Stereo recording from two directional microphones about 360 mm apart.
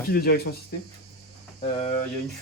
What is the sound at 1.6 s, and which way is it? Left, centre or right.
Speech, centre.